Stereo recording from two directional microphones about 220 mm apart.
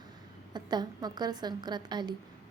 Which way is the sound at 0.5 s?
20° right (ahead or behind).